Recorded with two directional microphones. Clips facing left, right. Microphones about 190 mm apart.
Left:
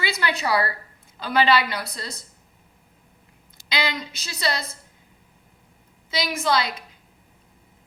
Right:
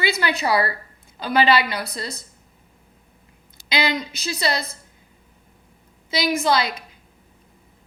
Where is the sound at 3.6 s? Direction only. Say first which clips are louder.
Right 3 dB; 90° right.